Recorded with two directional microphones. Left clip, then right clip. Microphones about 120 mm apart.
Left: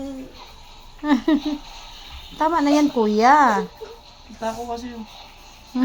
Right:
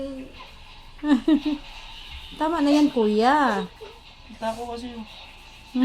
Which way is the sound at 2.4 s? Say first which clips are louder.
Left 3 dB; 10° left (ahead or behind).